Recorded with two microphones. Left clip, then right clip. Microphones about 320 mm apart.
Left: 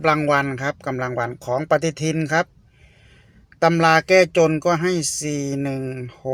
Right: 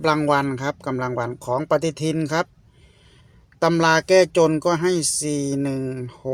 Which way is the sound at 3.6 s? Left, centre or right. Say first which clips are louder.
Left 2 dB; centre.